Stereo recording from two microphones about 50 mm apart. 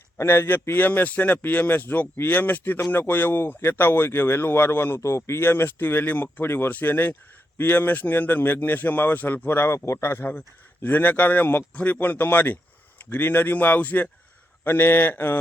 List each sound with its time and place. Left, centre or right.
0.2 s a man's voice: left
4.9 s speech: left
5.4 s a man's voice: left
9.6 s speech: left
10.0 s speech: left
10.8 s a man's voice: left
14.6 s speech: left